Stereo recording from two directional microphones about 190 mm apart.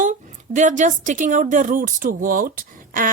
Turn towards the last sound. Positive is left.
turn(degrees=-45)  # may be behind; listen again after turning